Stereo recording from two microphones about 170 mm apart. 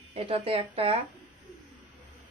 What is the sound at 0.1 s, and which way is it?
Speech, 35° right (ahead or behind).